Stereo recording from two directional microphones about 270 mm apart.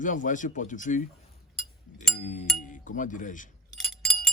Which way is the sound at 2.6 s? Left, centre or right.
Left.